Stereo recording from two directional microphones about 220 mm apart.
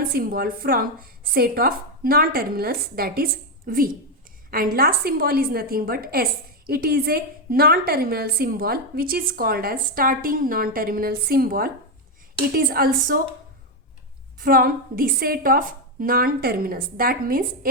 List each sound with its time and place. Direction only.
0.1 s a woman's voice: 45° right (ahead or behind)
14.3 s a woman's voice: 40° right (ahead or behind)